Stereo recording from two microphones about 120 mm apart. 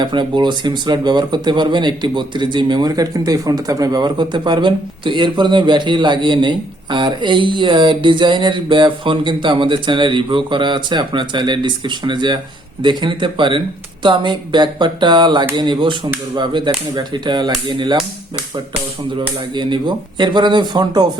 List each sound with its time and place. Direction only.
0.0 s speech: 40° right (ahead or behind)
19.5 s speech: 40° right (ahead or behind)